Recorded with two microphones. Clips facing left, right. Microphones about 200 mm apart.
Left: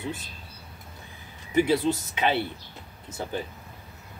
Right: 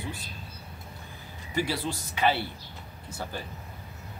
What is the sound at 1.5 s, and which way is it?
Speech, 20° left (ahead or behind).